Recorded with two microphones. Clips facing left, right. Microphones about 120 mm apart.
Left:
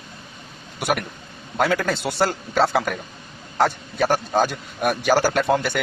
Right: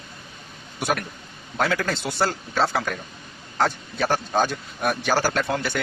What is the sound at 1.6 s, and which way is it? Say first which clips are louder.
Speech: left 3 dB; 10° left (ahead or behind).